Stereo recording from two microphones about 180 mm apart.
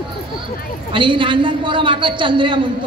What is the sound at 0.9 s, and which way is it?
A man's voice, 25° right (ahead or behind).